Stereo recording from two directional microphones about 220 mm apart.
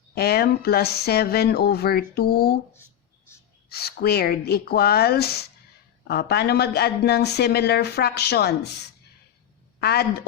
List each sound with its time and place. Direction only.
0.1 s speech: 45° left (ahead or behind)
3.7 s speech: 45° left (ahead or behind)
9.8 s speech: 45° left (ahead or behind)